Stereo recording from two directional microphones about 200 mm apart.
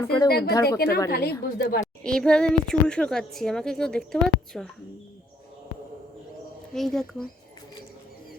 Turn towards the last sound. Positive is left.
turn(degrees=0)  # may be behind; listen again after turning